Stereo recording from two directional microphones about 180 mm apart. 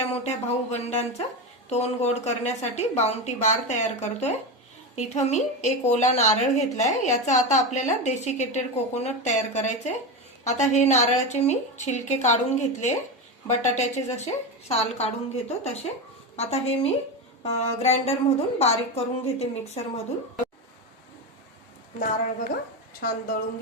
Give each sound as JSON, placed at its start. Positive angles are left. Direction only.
{"t": 0.0, "sound": "a woman's voice", "side_deg": 35}
{"t": 21.9, "sound": "a woman's voice", "side_deg": 45}